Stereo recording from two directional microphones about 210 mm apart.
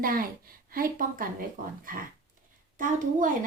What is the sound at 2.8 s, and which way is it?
Speech, 40° right (ahead or behind).